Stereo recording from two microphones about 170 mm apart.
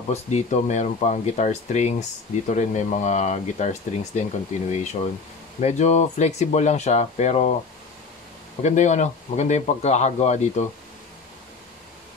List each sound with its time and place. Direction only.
0.1 s speech: 40° left (ahead or behind)
8.6 s speech: 45° left (ahead or behind)